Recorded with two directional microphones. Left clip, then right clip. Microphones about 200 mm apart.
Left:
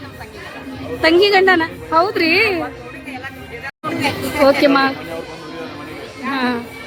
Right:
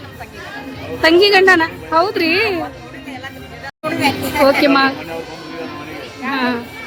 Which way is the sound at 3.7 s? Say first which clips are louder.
Right 3 dB; 15° right (ahead or behind).